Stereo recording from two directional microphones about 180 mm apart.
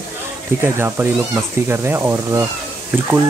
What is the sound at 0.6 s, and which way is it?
Speech, 15° right (ahead or behind).